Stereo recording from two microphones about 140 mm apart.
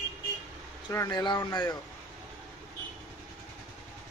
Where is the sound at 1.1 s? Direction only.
30° left (ahead or behind).